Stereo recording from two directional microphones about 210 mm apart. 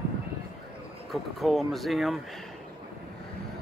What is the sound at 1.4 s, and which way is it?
Speech, centre (ahead or behind).